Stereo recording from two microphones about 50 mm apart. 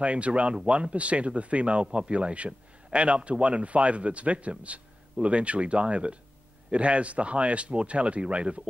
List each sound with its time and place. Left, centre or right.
0.0 s speech: right